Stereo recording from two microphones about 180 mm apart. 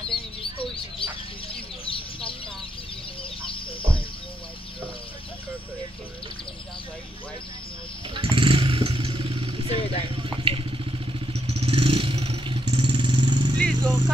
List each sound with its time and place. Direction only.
1.0 s chicken: 30° left (ahead or behind)
1.5 s bird: 30° left (ahead or behind)
8.1 s vehicle: 30° right (ahead or behind)
13.6 s vehicle: centre (ahead or behind)